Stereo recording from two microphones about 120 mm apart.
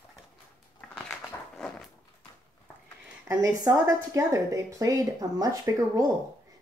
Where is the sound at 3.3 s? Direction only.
30° right (ahead or behind).